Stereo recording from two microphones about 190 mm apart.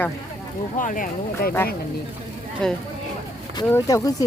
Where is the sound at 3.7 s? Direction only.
15° left (ahead or behind).